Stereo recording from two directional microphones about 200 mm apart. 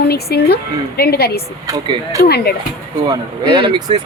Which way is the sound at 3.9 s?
25° right (ahead or behind).